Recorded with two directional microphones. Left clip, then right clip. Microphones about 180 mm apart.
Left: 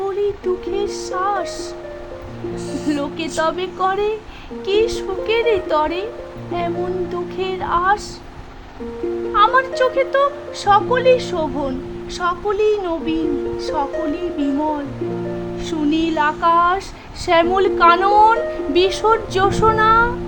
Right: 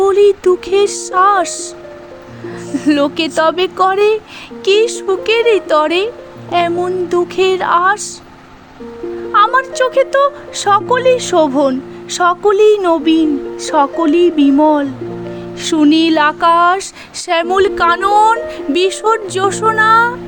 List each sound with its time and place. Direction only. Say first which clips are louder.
0.0 s speech: right 11 dB; 30° right (ahead or behind)
2.9 s speech: right 10 dB; 30° right (ahead or behind)
9.3 s speech: right 4 dB; 35° right (ahead or behind)